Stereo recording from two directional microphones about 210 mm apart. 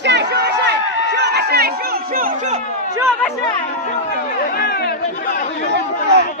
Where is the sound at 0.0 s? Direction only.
55° right (ahead or behind); by 2.6 s 40° right (ahead or behind).